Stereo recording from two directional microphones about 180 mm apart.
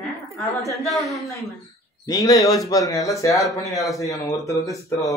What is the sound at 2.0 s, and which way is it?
Speech, 20° left (ahead or behind).